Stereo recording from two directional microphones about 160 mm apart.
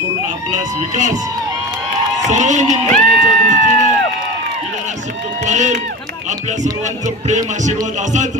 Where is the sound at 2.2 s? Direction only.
50° right (ahead or behind).